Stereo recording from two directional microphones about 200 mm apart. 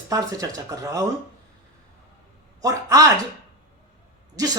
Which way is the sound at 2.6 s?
15° right (ahead or behind).